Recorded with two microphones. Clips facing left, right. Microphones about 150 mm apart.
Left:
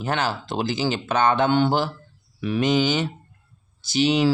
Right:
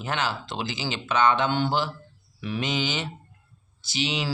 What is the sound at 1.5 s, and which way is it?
A man's voice, 55° left (ahead or behind).